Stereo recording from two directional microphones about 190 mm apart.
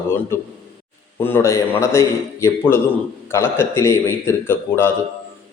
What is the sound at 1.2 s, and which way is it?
A man's voice, 15° left (ahead or behind).